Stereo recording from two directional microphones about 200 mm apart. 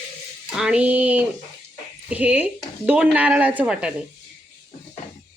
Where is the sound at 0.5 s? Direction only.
5° right (ahead or behind).